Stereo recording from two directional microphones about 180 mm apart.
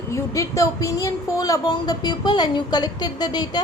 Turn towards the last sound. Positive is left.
turn(degrees=20)  # may be behind; listen again after turning